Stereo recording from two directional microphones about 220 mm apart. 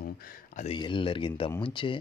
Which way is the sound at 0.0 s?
40° left (ahead or behind).